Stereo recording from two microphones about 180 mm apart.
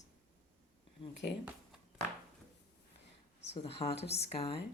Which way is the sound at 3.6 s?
35° left (ahead or behind).